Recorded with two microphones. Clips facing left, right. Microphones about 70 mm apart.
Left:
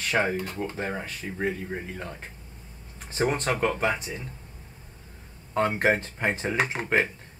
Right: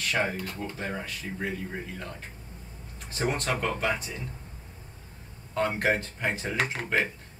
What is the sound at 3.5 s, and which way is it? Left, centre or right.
Speech, centre.